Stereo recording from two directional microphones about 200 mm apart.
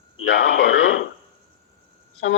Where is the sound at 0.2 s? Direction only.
65° left (ahead or behind).